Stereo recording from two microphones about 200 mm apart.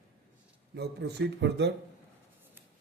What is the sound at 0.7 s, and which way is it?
Speech, 55° right (ahead or behind).